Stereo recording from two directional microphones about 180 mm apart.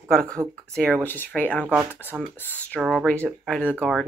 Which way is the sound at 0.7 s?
5° left (ahead or behind).